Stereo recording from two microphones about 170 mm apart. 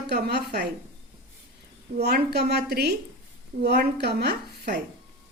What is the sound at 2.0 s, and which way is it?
A woman's voice, 75° right (ahead or behind).